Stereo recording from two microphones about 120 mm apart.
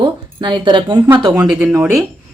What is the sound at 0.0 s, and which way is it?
Speech, 40° right (ahead or behind).